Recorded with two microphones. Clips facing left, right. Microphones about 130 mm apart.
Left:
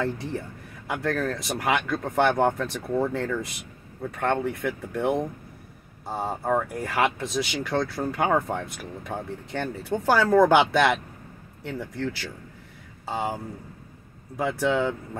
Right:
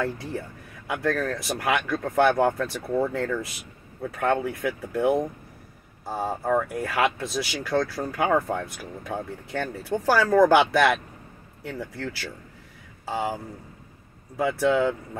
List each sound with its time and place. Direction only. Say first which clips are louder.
0.0 s speech: even; 5° right (ahead or behind)
6.0 s speech: right 1 dB; 25° left (ahead or behind)
6.3 s speech: right 1 dB; 10° left (ahead or behind)
14.4 s speech: right 2 dB; centre (ahead or behind)